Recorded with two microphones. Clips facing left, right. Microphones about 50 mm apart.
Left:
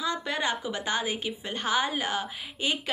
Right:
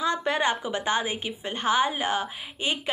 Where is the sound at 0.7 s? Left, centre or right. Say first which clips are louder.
Right 3 dB; right.